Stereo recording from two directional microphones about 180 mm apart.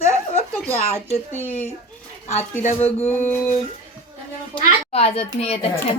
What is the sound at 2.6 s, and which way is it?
Speech, 40° left (ahead or behind).